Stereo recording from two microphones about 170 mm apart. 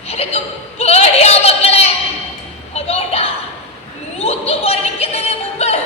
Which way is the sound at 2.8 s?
35° left (ahead or behind).